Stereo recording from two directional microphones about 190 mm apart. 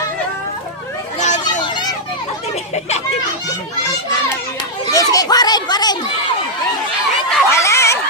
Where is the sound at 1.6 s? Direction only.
20° left (ahead or behind).